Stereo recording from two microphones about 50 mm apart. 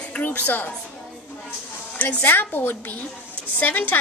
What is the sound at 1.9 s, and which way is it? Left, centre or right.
A woman's voice, left.